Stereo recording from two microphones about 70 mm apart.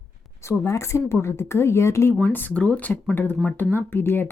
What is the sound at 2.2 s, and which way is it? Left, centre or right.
Speech, left.